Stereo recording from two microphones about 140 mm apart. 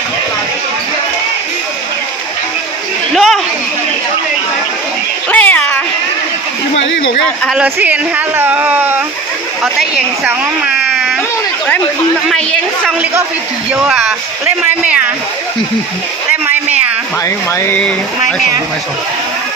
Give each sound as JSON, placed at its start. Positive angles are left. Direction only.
{"t": 3.2, "sound": "chatter", "side_deg": 0}
{"t": 5.3, "sound": "cat", "side_deg": 10}
{"t": 7.4, "sound": "speech", "side_deg": -10}
{"t": 12.3, "sound": "a woman's voice", "side_deg": 5}
{"t": 13.7, "sound": "speech", "side_deg": -10}
{"t": 16.3, "sound": "a sound", "side_deg": -10}
{"t": 17.2, "sound": "speech", "side_deg": 20}